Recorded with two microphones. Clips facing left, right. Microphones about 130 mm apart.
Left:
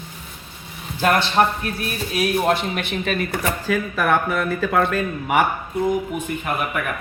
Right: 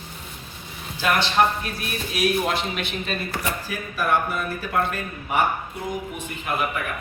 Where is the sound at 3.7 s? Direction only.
90° left.